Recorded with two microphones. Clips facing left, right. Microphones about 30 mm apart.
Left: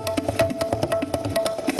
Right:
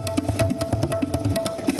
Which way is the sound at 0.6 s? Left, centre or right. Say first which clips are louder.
Left 1 dB; centre.